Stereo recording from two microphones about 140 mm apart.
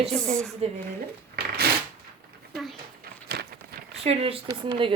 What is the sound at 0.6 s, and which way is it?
Speech, 50° right (ahead or behind).